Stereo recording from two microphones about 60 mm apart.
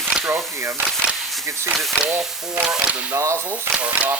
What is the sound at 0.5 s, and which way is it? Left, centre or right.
Speech, right.